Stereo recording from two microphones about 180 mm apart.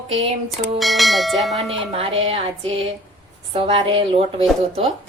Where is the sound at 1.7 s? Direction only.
30° right (ahead or behind).